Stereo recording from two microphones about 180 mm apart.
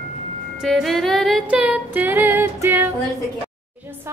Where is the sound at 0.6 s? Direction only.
Centre (ahead or behind).